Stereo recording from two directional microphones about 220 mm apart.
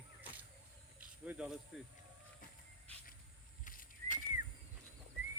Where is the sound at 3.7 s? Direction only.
40° left (ahead or behind).